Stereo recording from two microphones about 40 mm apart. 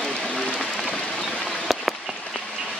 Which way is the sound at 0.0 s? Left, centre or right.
Centre.